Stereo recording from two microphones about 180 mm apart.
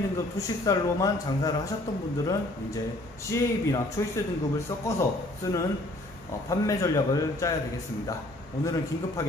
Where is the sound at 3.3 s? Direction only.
15° left (ahead or behind).